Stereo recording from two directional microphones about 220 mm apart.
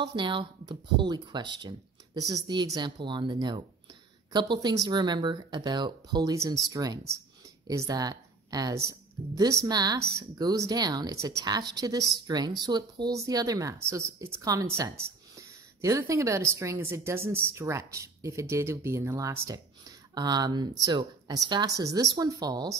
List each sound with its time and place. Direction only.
0.0 s a woman's voice: 20° right (ahead or behind)